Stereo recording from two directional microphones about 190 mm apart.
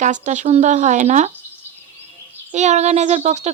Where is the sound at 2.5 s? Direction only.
35° right (ahead or behind).